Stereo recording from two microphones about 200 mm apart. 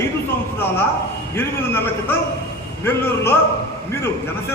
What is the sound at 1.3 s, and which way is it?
A man's voice, 10° left (ahead or behind).